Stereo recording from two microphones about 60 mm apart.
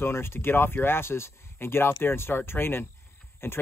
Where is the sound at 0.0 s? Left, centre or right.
Left.